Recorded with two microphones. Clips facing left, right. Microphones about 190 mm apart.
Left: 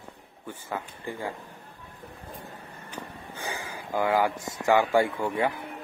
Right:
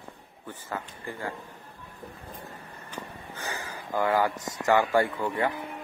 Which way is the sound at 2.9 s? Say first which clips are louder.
Even; 15° left (ahead or behind).